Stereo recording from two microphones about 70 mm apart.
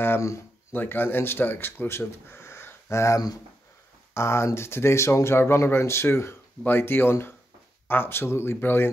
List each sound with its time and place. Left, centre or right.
0.7 s speech: left